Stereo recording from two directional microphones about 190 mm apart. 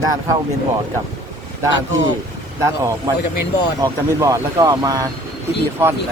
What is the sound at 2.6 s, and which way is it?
Speech, 15° right (ahead or behind).